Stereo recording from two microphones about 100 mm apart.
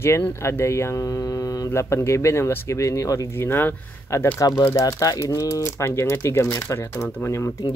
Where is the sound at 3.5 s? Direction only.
25° left (ahead or behind).